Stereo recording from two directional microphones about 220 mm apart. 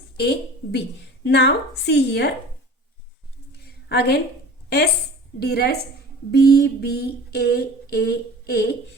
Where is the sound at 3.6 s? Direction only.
45° left (ahead or behind).